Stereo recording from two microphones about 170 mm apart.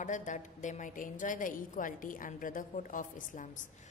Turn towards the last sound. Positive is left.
turn(degrees=50)  # may be behind; listen again after turning